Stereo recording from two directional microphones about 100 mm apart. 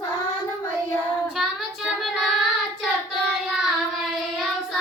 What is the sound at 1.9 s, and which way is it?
Child singing, centre (ahead or behind).